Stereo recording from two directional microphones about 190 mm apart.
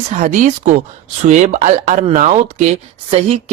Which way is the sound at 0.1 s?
40° right (ahead or behind).